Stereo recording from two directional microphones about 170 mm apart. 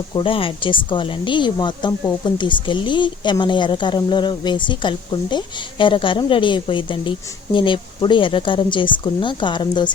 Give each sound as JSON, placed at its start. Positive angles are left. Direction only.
{"t": 0.1, "sound": "speech", "side_deg": 30}